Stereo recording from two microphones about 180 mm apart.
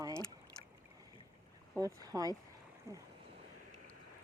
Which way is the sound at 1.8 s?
20° right (ahead or behind).